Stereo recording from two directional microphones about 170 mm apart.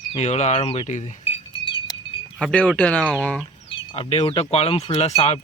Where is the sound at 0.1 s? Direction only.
40° left (ahead or behind).